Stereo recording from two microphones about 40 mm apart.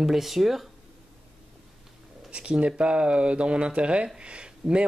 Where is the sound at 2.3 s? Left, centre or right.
Right.